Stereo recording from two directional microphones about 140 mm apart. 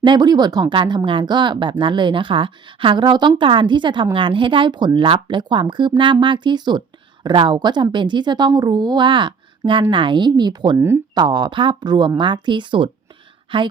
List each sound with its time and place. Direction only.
0.0 s speech: 30° right (ahead or behind)
10.8 s speech: 15° right (ahead or behind)
11.1 s speech: 30° right (ahead or behind)